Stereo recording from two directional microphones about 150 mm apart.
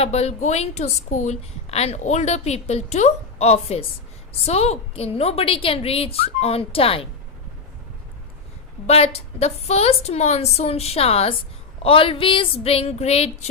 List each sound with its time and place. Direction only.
0.0 s a woman's voice: 45° left (ahead or behind)
8.9 s a woman's voice: 45° left (ahead or behind)